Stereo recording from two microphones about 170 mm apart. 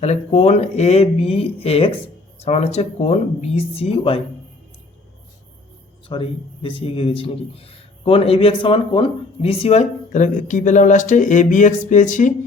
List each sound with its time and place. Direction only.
0.0 s a man's voice: 40° left (ahead or behind)
6.1 s a man's voice: 30° left (ahead or behind); by 12.3 s 45° left (ahead or behind)